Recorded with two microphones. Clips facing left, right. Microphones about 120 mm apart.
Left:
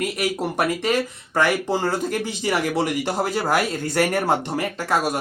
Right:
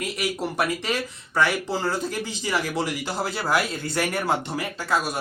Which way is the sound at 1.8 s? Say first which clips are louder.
Left 3 dB; 55° left (ahead or behind).